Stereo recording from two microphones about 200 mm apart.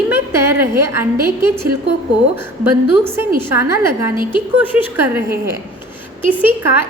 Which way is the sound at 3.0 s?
10° right (ahead or behind).